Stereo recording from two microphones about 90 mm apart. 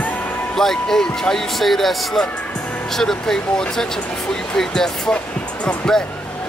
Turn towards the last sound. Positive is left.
turn(degrees=10)  # may be behind; listen again after turning